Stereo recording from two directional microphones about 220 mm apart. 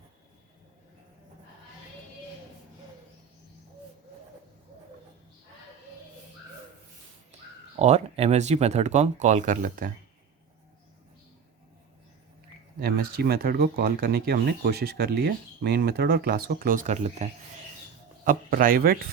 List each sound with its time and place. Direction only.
7.8 s speech: 30° right (ahead or behind)
12.8 s speech: 45° right (ahead or behind)
18.3 s speech: 40° right (ahead or behind)